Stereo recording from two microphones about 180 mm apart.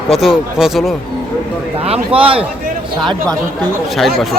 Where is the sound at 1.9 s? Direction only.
30° right (ahead or behind).